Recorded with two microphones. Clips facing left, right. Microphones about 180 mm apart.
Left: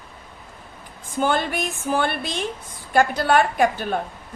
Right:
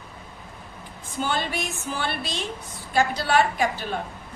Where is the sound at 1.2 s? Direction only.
55° left (ahead or behind).